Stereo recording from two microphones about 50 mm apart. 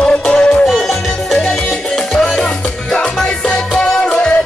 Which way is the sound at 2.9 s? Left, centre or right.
Left.